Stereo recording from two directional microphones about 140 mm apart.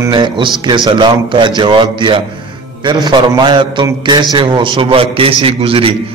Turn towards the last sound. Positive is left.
turn(degrees=-40)  # may be behind; listen again after turning